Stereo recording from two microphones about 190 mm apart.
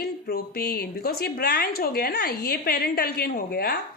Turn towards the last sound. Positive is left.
turn(degrees=55)  # may be behind; listen again after turning